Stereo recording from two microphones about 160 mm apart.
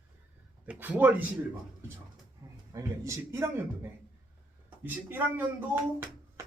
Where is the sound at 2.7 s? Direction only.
20° right (ahead or behind).